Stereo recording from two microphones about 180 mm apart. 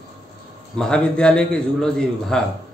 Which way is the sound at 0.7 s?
5° left (ahead or behind).